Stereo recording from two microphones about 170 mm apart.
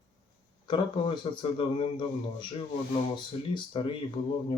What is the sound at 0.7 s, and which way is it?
A man's voice, 30° left (ahead or behind).